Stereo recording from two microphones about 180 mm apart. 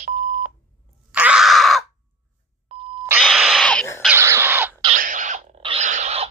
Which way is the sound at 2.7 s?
30° right (ahead or behind).